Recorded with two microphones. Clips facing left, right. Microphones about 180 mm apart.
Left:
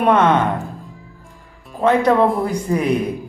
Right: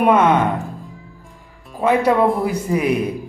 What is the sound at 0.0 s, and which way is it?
Speech, 10° right (ahead or behind).